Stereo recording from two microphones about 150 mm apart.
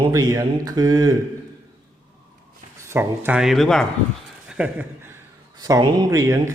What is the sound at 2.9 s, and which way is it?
Speech, 15° right (ahead or behind).